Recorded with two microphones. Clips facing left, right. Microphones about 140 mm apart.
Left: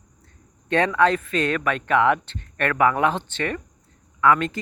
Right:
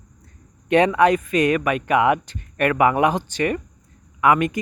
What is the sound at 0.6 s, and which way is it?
A man's voice, 15° right (ahead or behind).